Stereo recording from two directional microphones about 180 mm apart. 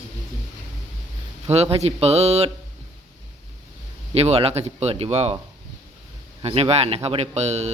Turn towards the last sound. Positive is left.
turn(degrees=-40)  # may be behind; listen again after turning